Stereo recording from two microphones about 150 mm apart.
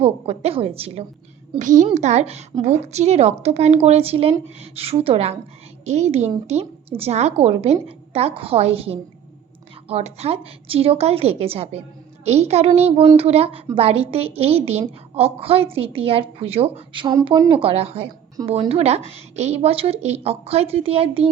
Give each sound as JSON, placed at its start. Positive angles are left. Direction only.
{"t": 0.0, "sound": "a woman's voice", "side_deg": -40}
{"t": 1.5, "sound": "a woman's voice", "side_deg": -55}
{"t": 18.4, "sound": "a woman's voice", "side_deg": -25}
{"t": 18.7, "sound": "a woman's voice", "side_deg": -45}